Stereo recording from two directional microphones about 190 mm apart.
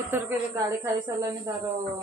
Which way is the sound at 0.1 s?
10° right (ahead or behind).